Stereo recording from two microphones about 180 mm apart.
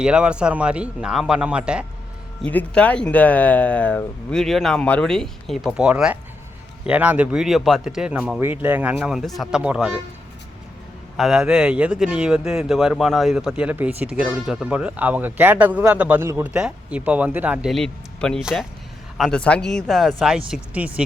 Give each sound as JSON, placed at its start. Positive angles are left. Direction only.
{"t": 0.0, "sound": "speech", "side_deg": -5}
{"t": 2.4, "sound": "a man's voice", "side_deg": 5}
{"t": 11.2, "sound": "a man's voice", "side_deg": 0}